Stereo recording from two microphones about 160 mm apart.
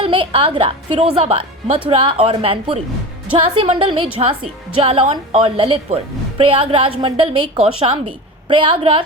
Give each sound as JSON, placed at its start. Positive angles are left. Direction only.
{"t": 0.0, "sound": "a woman's voice", "side_deg": -35}